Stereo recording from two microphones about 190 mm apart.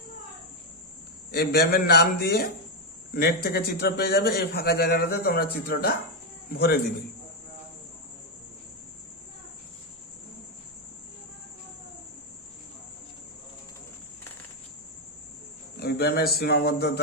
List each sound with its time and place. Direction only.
1.3 s a man's voice: 55° left (ahead or behind)
15.8 s a man's voice: 60° left (ahead or behind)